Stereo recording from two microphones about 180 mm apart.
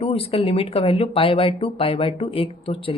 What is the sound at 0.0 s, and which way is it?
Speech, 35° left (ahead or behind).